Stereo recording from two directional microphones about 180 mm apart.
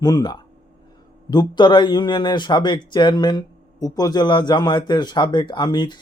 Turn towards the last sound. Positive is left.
turn(degrees=25)  # may be behind; listen again after turning